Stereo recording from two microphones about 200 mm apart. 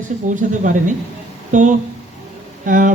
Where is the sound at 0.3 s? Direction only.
40° right (ahead or behind).